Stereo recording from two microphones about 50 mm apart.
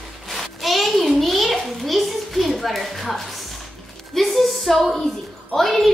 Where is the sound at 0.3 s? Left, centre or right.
Centre.